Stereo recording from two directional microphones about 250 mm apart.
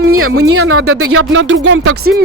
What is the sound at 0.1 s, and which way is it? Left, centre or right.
Speech, right.